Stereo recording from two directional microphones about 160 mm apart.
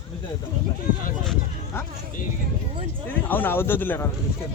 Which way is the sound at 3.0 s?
10° left (ahead or behind).